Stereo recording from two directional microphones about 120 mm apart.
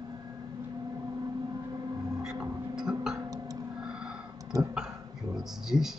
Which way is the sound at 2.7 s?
5° right (ahead or behind).